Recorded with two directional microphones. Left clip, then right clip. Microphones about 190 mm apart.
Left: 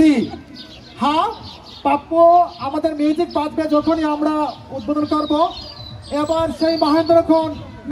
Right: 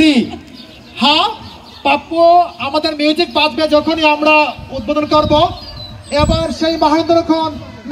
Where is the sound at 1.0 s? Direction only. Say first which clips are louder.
Right 6 dB; 35° left (ahead or behind).